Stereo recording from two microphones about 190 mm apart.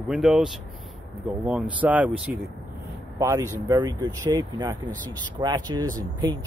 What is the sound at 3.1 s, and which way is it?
Speech, 15° right (ahead or behind).